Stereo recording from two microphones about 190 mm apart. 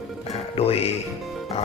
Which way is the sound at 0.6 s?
30° left (ahead or behind).